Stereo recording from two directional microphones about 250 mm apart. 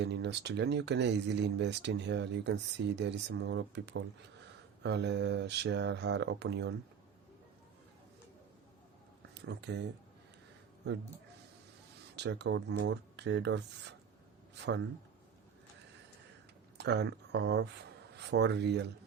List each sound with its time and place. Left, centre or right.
0.0 s speech: right
9.3 s speech: right
12.1 s speech: right
16.7 s speech: right